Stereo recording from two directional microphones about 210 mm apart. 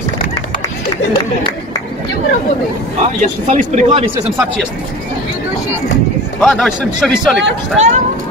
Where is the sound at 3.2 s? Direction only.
35° right (ahead or behind).